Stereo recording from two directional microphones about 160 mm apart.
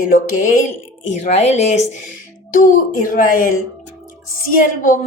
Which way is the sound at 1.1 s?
45° left (ahead or behind).